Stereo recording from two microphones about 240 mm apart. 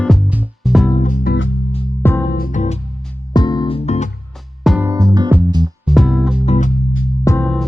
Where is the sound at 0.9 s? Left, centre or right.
Left.